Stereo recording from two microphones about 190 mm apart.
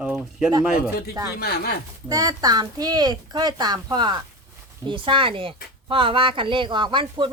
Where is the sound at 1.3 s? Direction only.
55° left (ahead or behind).